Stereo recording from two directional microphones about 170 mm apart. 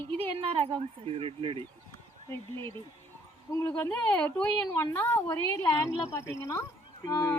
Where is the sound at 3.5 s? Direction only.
15° left (ahead or behind).